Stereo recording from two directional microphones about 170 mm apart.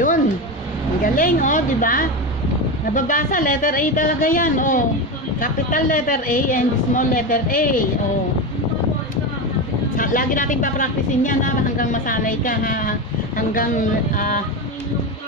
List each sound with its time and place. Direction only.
1.0 s a woman's voice: 55° left (ahead or behind)
9.9 s a woman's voice: 50° left (ahead or behind)